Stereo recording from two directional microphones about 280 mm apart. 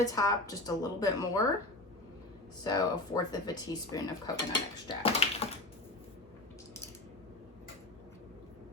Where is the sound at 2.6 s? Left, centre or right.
Centre.